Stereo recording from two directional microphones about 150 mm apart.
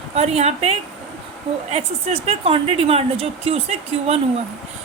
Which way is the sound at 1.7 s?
45° right (ahead or behind).